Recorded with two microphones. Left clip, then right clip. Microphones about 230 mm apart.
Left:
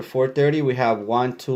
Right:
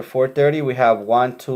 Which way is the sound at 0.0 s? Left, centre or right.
Left.